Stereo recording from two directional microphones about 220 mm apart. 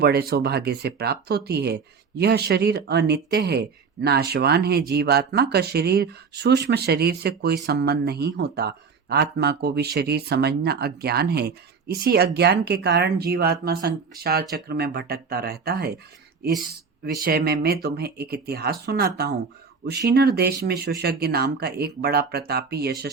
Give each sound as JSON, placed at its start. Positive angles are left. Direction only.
{"t": 0.0, "sound": "speech", "side_deg": -45}
{"t": 17.0, "sound": "speech", "side_deg": -40}